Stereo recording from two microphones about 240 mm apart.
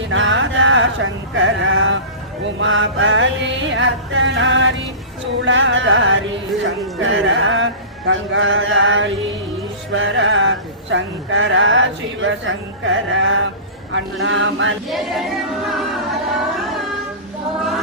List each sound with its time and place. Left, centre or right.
0.1 s a sound: right
2.6 s speech: right
7.0 s music: right
9.9 s speech: right
14.8 s choir: centre